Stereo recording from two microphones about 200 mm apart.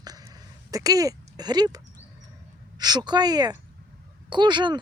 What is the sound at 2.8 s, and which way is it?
Speech, 20° right (ahead or behind).